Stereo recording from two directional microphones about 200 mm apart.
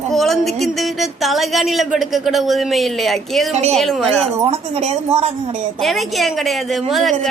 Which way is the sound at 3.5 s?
30° right (ahead or behind).